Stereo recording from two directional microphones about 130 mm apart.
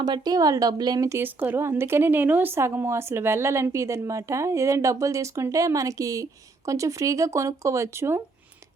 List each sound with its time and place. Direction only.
0.0 s a woman's voice: 30° right (ahead or behind)